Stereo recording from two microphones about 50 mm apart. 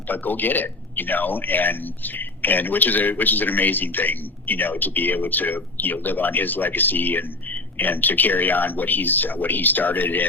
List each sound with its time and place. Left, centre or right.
0.1 s speech: left